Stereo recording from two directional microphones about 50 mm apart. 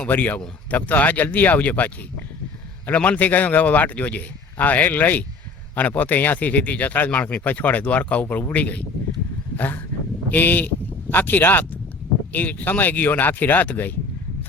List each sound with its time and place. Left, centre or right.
0.1 s speech: left
9.6 s a sound: left
10.2 s speech: left